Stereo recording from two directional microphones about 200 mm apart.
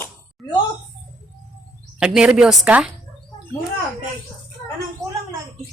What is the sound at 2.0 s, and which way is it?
Speech, 5° right (ahead or behind).